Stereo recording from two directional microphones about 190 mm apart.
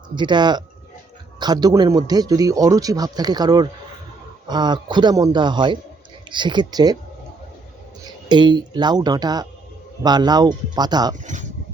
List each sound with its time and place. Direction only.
0.2 s a man's voice: 25° right (ahead or behind)
8.3 s a man's voice: 25° right (ahead or behind)